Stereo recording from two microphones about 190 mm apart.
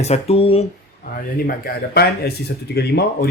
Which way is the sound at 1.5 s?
55° left (ahead or behind).